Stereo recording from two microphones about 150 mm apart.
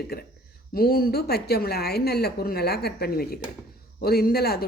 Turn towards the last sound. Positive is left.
turn(degrees=90)